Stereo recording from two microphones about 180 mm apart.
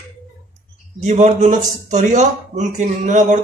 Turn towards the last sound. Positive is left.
turn(degrees=-45)  # may be behind; listen again after turning